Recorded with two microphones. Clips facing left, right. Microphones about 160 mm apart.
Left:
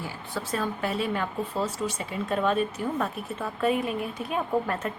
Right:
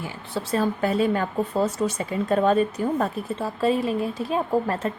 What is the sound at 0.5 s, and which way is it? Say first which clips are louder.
Speech: right 7 dB; 40° right (ahead or behind).